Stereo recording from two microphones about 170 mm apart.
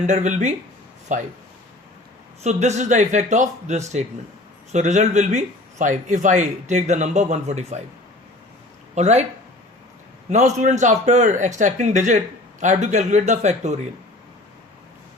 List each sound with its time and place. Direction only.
0.0 s a man's voice: 45° right (ahead or behind)
2.4 s a man's voice: 40° right (ahead or behind)
9.0 s speech: 40° right (ahead or behind)
10.2 s a man's voice: 45° right (ahead or behind)